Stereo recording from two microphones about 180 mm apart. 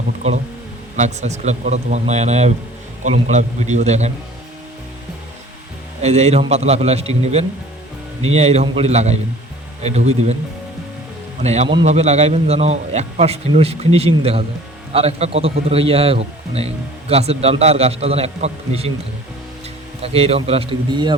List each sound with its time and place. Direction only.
0.9 s a man's voice: 40° right (ahead or behind)
6.0 s a man's voice: 35° right (ahead or behind)
11.4 s a man's voice: 35° right (ahead or behind)
20.0 s a man's voice: 35° right (ahead or behind)